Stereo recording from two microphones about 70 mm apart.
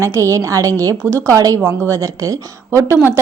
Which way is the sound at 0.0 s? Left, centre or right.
Right.